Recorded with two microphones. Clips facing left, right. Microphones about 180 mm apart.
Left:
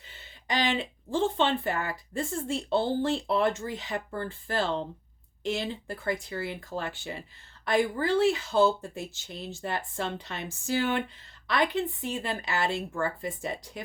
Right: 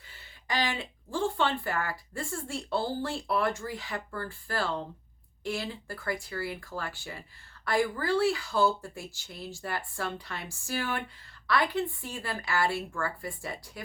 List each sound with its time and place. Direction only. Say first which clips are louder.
0.1 s speech: left 2 dB; 20° left (ahead or behind)